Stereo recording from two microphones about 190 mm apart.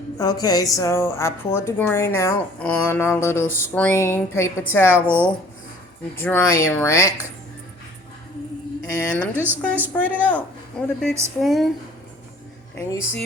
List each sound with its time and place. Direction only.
0.2 s speech: 20° left (ahead or behind)
4.9 s speech: 10° right (ahead or behind)
6.1 s speech: 10° left (ahead or behind)
8.9 s speech: 5° left (ahead or behind)
9.3 s speech: 10° right (ahead or behind)
9.6 s speech: 10° left (ahead or behind)